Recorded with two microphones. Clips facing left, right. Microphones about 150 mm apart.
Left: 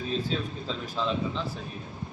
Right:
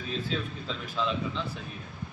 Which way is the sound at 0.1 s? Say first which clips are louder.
Left 1 dB; 35° left (ahead or behind).